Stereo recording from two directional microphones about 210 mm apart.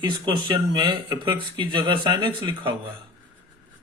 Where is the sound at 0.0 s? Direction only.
20° right (ahead or behind).